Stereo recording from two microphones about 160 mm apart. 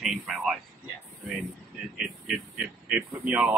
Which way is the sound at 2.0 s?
5° right (ahead or behind).